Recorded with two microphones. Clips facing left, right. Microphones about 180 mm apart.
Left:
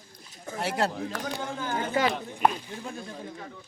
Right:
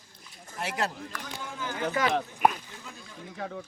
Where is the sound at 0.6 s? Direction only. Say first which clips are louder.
Left 4 dB; 30° left (ahead or behind).